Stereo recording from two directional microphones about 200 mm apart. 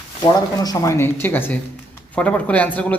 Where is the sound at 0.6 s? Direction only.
15° left (ahead or behind).